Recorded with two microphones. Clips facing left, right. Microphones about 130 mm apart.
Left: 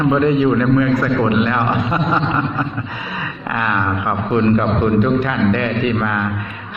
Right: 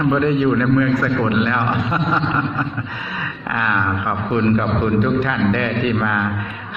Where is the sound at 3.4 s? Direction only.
20° left (ahead or behind).